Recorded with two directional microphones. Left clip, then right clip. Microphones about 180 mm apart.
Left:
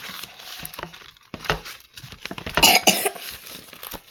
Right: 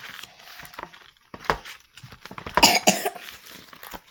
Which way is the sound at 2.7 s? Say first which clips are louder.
Left 3 dB; 5° left (ahead or behind).